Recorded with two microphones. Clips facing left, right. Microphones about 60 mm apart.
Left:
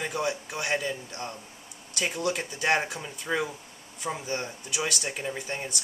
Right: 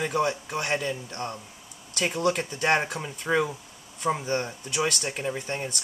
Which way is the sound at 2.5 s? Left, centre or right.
Right.